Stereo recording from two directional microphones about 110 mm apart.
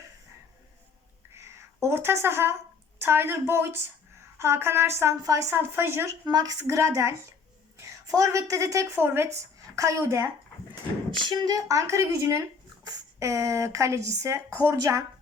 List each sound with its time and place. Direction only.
1.3 s a sound: 25° right (ahead or behind)
3.0 s a woman's voice: 20° right (ahead or behind)
6.2 s a woman's voice: 35° right (ahead or behind)
11.2 s a woman's voice: 40° right (ahead or behind)